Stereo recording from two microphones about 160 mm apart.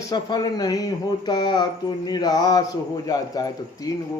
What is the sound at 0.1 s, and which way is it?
Speech, 25° left (ahead or behind).